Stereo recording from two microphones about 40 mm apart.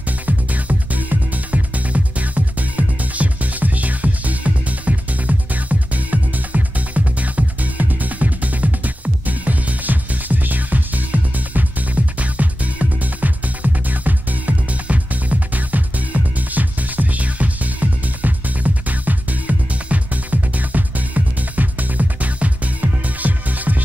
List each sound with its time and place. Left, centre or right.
0.5 s music: right